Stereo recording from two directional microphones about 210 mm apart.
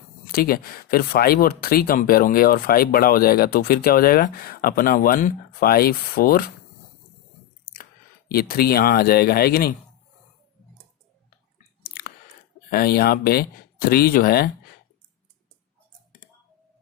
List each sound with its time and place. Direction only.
0.3 s speech: 45° left (ahead or behind)
7.6 s chewing: 45° left (ahead or behind)
8.3 s speech: 45° left (ahead or behind)
11.8 s chewing: 45° left (ahead or behind)
12.7 s speech: 45° left (ahead or behind)